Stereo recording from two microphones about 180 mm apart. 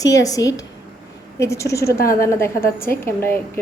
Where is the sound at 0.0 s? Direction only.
20° left (ahead or behind).